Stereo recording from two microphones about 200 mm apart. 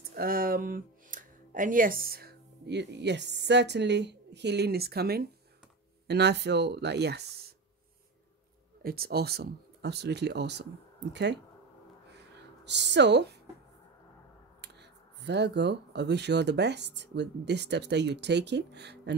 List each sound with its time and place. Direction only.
0.1 s speech: 45° right (ahead or behind)
8.8 s speech: 50° right (ahead or behind)
12.6 s speech: 60° right (ahead or behind)
14.6 s speech: 60° right (ahead or behind)